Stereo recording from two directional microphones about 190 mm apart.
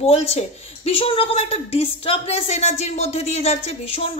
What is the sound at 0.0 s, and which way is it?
Speech, 30° left (ahead or behind).